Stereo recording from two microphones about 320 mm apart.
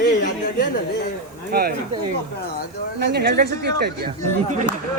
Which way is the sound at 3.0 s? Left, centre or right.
Right.